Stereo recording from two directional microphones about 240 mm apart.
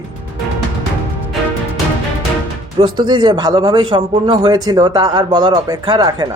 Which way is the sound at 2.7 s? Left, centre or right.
Centre.